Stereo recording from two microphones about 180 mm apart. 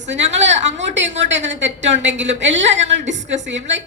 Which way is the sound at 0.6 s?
80° right.